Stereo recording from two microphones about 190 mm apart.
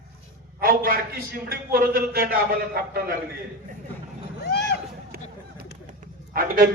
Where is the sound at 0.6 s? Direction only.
50° right (ahead or behind).